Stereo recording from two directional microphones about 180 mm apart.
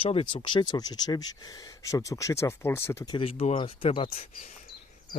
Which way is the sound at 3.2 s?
30° left (ahead or behind).